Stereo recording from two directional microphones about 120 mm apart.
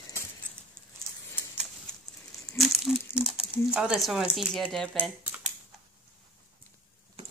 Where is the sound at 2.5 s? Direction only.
Centre (ahead or behind).